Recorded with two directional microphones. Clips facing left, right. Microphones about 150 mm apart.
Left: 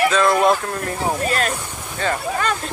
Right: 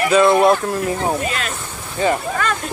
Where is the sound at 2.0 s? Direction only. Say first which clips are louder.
Right 5 dB; 15° right (ahead or behind).